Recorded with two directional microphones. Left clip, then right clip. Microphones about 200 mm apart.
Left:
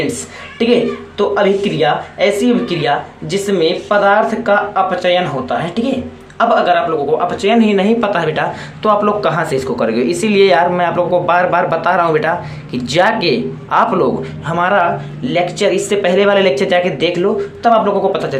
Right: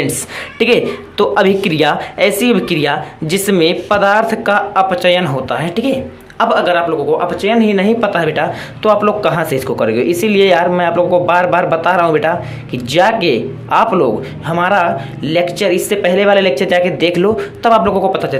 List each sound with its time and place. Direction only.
1.2 s speech: 45° right (ahead or behind); by 17.2 s 20° right (ahead or behind)
17.2 s speech: 35° right (ahead or behind)